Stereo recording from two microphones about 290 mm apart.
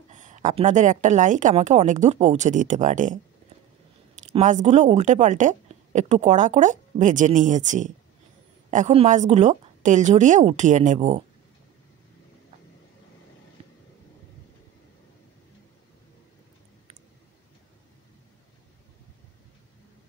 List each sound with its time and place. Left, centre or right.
0.1 s a woman's voice: right
4.3 s a woman's voice: right
13.6 s vehicle: right